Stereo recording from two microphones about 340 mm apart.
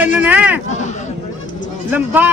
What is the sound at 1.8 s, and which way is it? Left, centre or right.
Speech, centre.